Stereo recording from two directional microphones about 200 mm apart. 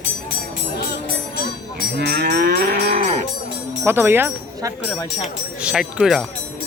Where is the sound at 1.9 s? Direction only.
55° right (ahead or behind); by 3.2 s 35° right (ahead or behind).